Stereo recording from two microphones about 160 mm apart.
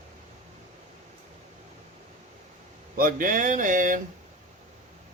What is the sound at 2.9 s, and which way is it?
Speech, 60° right (ahead or behind).